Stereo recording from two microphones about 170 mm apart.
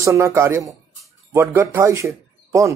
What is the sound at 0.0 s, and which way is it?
Speech, 15° right (ahead or behind).